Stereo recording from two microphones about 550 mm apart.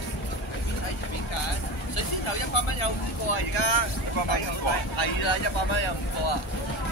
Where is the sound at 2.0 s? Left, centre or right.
Left.